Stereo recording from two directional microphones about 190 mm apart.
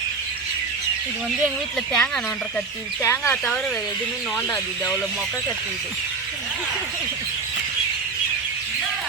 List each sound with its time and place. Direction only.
1.9 s speech: 5° left (ahead or behind)